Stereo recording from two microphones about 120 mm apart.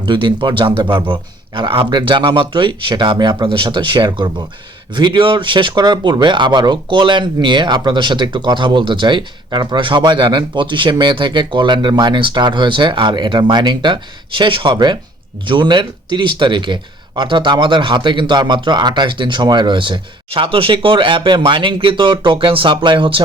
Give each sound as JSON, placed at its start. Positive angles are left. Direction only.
{"t": 0.0, "sound": "speech", "side_deg": -40}